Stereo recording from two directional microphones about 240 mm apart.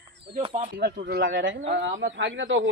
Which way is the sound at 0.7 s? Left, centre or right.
Right.